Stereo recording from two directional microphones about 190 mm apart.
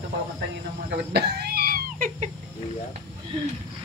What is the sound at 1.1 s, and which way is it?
Cough, 60° right (ahead or behind).